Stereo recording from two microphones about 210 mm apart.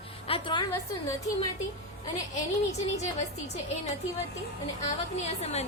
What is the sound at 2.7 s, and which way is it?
A woman's voice, 30° left (ahead or behind).